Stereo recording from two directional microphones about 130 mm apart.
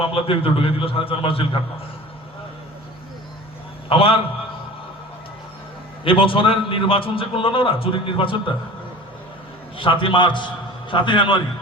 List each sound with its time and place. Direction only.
0.0 s a man's voice: 45° left (ahead or behind)
3.8 s a man's voice: 45° left (ahead or behind)
6.1 s a man's voice: 45° left (ahead or behind)
9.7 s a man's voice: 40° left (ahead or behind)